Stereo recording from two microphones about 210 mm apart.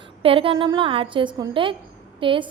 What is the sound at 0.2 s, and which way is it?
A woman's voice, 25° right (ahead or behind).